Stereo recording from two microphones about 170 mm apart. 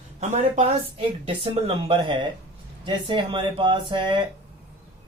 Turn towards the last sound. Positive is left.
turn(degrees=-30)  # may be behind; listen again after turning